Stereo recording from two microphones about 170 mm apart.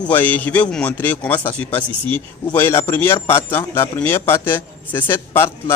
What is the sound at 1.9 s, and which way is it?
Speech, 30° right (ahead or behind).